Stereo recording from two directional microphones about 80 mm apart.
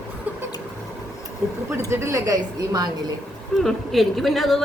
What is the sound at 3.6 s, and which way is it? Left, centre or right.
A woman's voice, centre.